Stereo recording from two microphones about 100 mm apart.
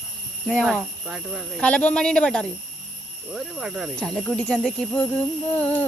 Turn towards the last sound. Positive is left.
turn(degrees=15)  # may be behind; listen again after turning